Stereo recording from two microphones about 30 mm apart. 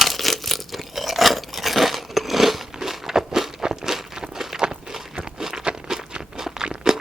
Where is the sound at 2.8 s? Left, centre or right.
Centre.